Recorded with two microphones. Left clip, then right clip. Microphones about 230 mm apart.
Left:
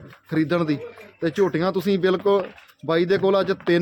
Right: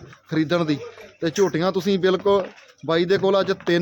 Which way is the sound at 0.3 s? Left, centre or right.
Centre.